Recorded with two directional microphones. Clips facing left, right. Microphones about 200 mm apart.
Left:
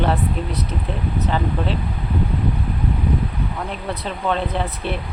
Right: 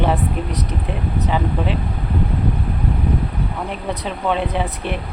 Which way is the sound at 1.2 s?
10° right (ahead or behind).